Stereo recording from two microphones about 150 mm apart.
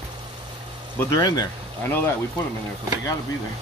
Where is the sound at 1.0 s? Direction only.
25° left (ahead or behind).